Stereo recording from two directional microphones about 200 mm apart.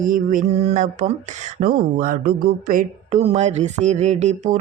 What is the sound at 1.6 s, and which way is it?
Speech, 45° right (ahead or behind).